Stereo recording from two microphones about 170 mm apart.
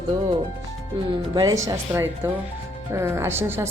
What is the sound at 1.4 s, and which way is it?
A woman's voice, 20° right (ahead or behind).